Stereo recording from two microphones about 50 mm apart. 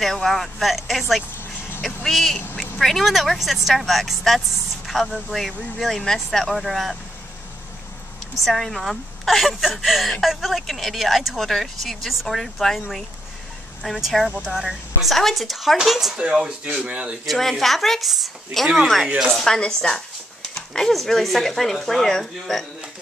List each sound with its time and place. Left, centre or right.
0.0 s speech: centre
1.8 s vehicle: centre
2.5 s speech: centre
8.5 s speech: centre
16.2 s speech: centre
17.3 s speech: centre